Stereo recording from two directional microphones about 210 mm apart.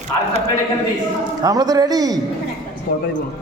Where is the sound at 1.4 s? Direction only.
20° right (ahead or behind).